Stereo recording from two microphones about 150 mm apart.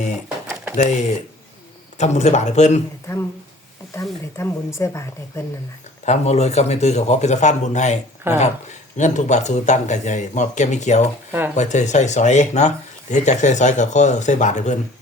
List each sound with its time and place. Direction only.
0.8 s speech: 50° left (ahead or behind)
3.1 s speech: 15° left (ahead or behind)
4.4 s speech: 20° left (ahead or behind)
6.1 s speech: 45° left (ahead or behind)
8.3 s speech: 15° right (ahead or behind)
9.0 s speech: 55° left (ahead or behind)
11.3 s speech: 15° right (ahead or behind)
11.5 s speech: 50° left (ahead or behind)